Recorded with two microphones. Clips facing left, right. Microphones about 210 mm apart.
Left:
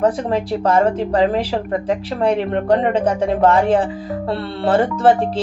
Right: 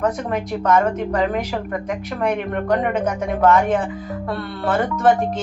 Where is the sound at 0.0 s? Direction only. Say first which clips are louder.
Left 4 dB; 30° left (ahead or behind).